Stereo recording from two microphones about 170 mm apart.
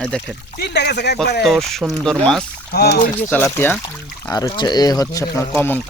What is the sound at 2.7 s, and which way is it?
Speech, 70° left (ahead or behind).